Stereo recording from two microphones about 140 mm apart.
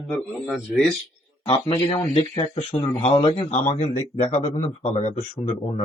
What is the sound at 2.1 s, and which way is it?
Speech, 45° left (ahead or behind).